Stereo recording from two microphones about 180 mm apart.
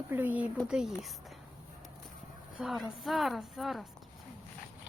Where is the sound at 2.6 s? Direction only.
Centre (ahead or behind).